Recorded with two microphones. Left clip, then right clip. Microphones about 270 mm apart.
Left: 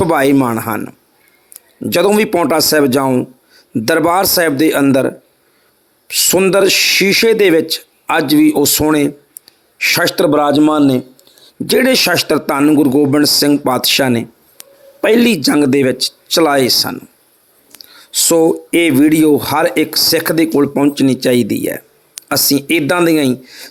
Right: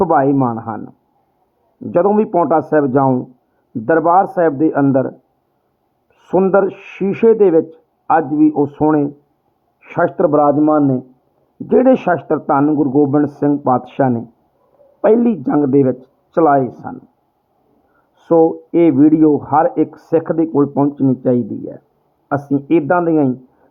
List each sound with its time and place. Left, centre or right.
0.0 s speech: left
6.3 s speech: left
18.1 s speech: left